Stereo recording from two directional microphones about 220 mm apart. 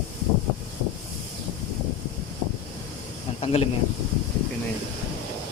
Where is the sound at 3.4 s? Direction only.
25° left (ahead or behind).